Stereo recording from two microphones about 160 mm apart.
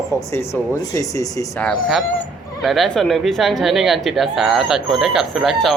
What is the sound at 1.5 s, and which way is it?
Speech, 5° left (ahead or behind).